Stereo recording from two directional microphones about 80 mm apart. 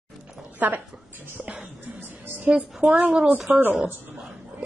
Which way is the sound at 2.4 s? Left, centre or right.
Centre.